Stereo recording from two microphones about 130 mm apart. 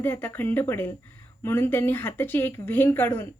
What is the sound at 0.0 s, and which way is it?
Speech, 15° left (ahead or behind).